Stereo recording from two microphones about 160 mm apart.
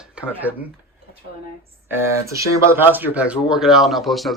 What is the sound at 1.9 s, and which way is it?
Speech, 15° right (ahead or behind).